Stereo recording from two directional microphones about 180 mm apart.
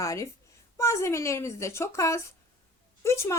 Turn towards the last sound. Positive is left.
turn(degrees=15)  # may be behind; listen again after turning